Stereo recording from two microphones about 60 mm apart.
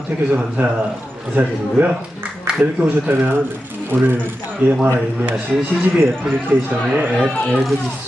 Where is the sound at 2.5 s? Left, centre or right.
Centre.